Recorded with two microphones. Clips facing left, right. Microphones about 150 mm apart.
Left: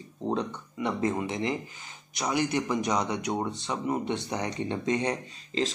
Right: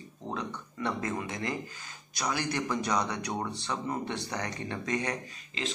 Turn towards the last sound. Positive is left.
turn(degrees=25)  # may be behind; listen again after turning